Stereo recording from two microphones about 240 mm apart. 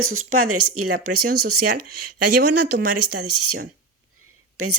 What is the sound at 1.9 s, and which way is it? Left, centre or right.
Speech, right.